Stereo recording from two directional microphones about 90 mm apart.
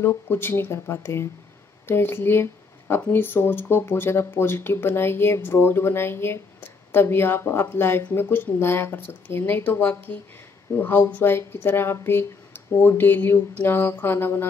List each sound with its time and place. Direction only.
0.0 s speech: 25° left (ahead or behind)